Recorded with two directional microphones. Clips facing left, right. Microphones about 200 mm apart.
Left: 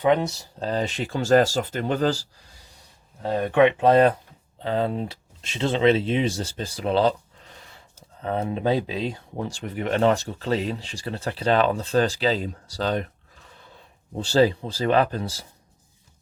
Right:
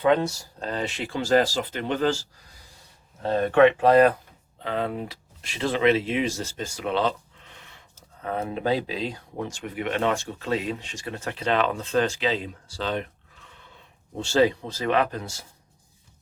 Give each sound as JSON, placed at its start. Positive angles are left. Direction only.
{"t": 0.0, "sound": "speech", "side_deg": 15}
{"t": 0.6, "sound": "speech", "side_deg": 35}
{"t": 3.2, "sound": "speech", "side_deg": 15}
{"t": 9.6, "sound": "speech", "side_deg": 40}